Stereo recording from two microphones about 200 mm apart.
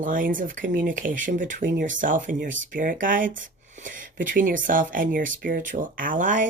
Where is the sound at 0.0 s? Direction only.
45° right (ahead or behind).